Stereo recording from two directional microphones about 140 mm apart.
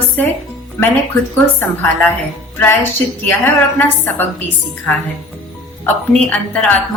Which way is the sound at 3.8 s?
15° left (ahead or behind).